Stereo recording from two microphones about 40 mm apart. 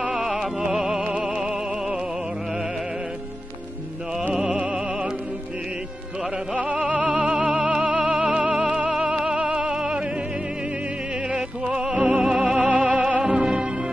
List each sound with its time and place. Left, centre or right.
0.1 s music: centre
1.2 s opera: centre
4.3 s music: centre
6.5 s music: right
11.3 s music: centre
12.5 s music: right
13.2 s music: centre